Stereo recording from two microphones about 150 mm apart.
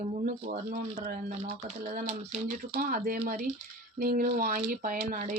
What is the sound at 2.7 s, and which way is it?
Speech, 70° right (ahead or behind).